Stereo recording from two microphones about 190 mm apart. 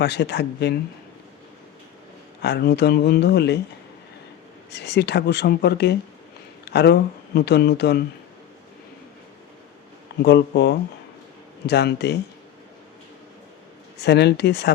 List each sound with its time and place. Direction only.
0.0 s speech: 60° left (ahead or behind)
2.4 s speech: 60° left (ahead or behind)
4.7 s speech: 65° left (ahead or behind)
10.2 s speech: 60° left (ahead or behind)
14.0 s speech: 60° left (ahead or behind)